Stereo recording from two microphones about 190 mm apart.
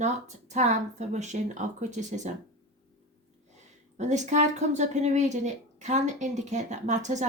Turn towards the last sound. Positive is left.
turn(degrees=-40)  # may be behind; listen again after turning